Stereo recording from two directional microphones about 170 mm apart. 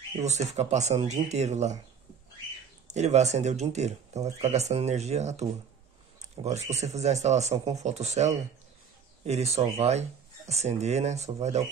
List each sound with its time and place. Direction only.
0.2 s speech: 40° right (ahead or behind)
2.9 s speech: 40° right (ahead or behind)